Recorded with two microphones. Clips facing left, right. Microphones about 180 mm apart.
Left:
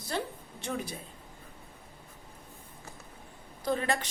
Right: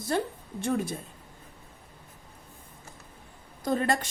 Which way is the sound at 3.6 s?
45° right (ahead or behind).